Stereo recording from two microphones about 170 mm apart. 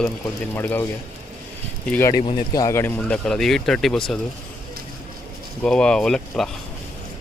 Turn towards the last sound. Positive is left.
turn(degrees=5)  # may be behind; listen again after turning